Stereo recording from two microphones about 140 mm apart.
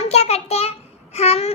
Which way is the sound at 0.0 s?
50° left (ahead or behind).